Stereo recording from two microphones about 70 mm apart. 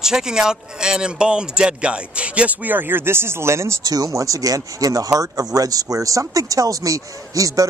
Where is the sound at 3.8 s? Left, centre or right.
Right.